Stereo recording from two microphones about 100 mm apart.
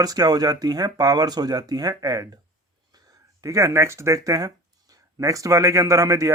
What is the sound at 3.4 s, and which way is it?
Speech, 30° right (ahead or behind).